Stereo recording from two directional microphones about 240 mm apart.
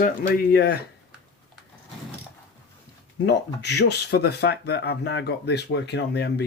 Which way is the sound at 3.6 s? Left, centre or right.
Left.